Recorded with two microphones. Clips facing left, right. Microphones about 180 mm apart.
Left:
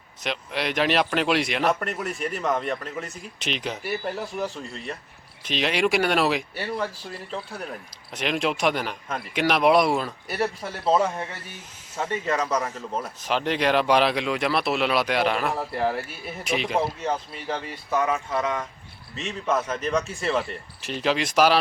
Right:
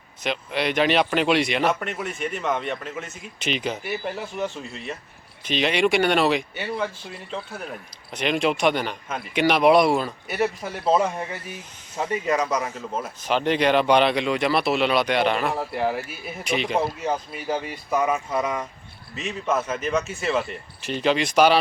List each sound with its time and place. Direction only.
0.2 s speech: centre (ahead or behind)
17.9 s speech: 20° right (ahead or behind)
19.1 s speech: 5° right (ahead or behind)